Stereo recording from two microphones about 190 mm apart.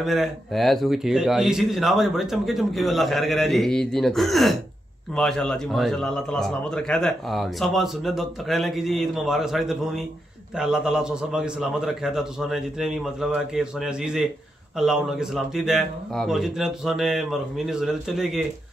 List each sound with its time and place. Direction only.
0.0 s a man's voice: centre (ahead or behind)